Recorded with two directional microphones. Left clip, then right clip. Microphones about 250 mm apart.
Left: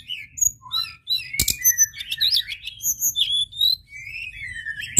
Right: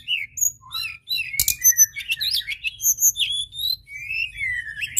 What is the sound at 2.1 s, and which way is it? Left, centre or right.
Bird, centre.